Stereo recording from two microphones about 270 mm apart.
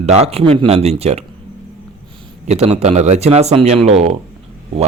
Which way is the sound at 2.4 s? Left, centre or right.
Right.